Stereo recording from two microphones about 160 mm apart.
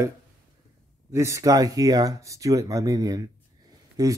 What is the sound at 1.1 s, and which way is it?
Speech, 20° right (ahead or behind).